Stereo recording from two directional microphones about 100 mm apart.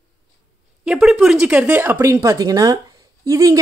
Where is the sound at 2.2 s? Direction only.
35° right (ahead or behind).